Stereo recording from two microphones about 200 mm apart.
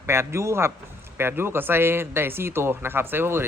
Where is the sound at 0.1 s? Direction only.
15° right (ahead or behind).